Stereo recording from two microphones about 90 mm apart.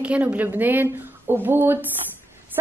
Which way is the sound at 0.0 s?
15° right (ahead or behind).